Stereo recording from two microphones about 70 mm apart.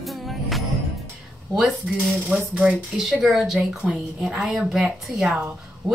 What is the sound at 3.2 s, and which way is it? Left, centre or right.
Speech, centre.